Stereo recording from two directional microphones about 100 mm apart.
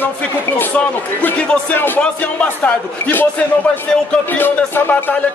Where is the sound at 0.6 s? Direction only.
15° left (ahead or behind).